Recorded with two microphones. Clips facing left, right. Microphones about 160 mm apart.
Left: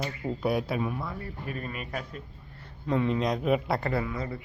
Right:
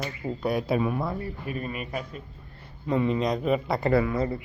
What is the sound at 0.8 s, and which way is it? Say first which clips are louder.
Speech: right 5 dB; 75° right (ahead or behind).